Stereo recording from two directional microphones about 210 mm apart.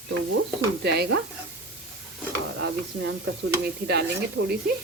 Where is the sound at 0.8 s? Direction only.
50° right (ahead or behind).